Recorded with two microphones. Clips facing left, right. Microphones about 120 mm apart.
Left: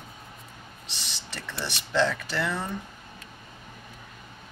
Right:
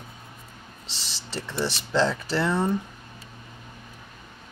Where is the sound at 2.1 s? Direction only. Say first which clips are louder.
Right 5 dB; 25° right (ahead or behind).